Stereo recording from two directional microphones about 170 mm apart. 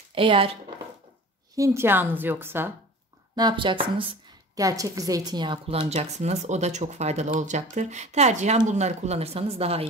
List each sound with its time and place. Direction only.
0.1 s speech: 30° right (ahead or behind)
1.6 s a woman's voice: 15° right (ahead or behind)
3.3 s speech: 25° right (ahead or behind)
4.6 s a woman's voice: 20° right (ahead or behind); by 9.8 s 35° right (ahead or behind)